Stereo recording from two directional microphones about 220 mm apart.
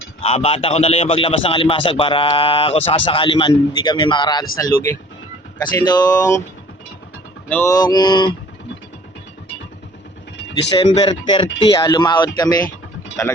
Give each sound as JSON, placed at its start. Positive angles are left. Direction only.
{"t": 0.2, "sound": "a man's voice", "side_deg": 30}
{"t": 7.5, "sound": "speech", "side_deg": 15}
{"t": 10.8, "sound": "a man's voice", "side_deg": 25}